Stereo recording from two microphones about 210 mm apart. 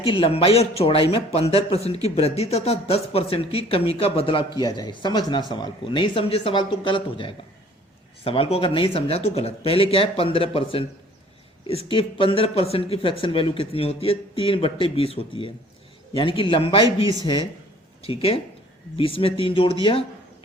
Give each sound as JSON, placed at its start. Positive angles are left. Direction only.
{"t": 0.0, "sound": "speech", "side_deg": 25}
{"t": 18.0, "sound": "speech", "side_deg": 25}